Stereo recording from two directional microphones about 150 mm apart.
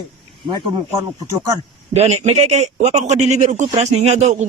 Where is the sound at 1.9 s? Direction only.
45° right (ahead or behind).